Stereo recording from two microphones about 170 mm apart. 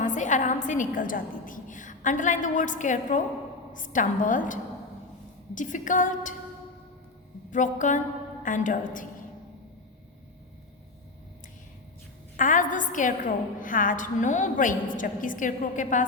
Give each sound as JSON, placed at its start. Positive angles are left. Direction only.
{"t": 0.0, "sound": "a woman's voice", "side_deg": 45}
{"t": 7.5, "sound": "a woman's voice", "side_deg": 45}
{"t": 12.4, "sound": "a woman's voice", "side_deg": 50}